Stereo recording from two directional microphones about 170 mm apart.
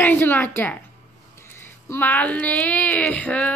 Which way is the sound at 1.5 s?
15° left (ahead or behind).